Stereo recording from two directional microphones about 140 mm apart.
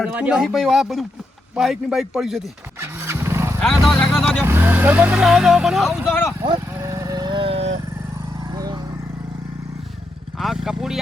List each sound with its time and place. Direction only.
0.0 s speech: 5° right (ahead or behind)
2.7 s vehicle: 15° right (ahead or behind)
3.6 s vehicle: centre (ahead or behind)
4.4 s speech: 15° right (ahead or behind)
6.4 s vehicle: 30° right (ahead or behind)
8.5 s vehicle: 25° right (ahead or behind)
10.3 s speech: centre (ahead or behind)